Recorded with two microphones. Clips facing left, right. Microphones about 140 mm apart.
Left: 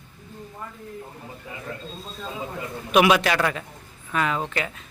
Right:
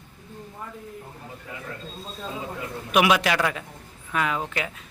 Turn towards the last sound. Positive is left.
turn(degrees=-5)  # may be behind; listen again after turning